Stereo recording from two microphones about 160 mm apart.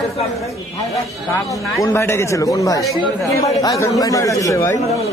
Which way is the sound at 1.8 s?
15° left (ahead or behind).